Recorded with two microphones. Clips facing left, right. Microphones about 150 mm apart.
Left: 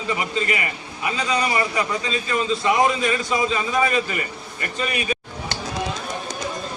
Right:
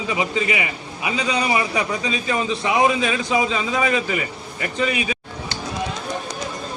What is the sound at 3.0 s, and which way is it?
Speech, 85° right.